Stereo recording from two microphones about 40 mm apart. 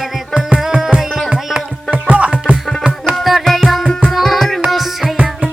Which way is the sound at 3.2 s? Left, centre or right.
Centre.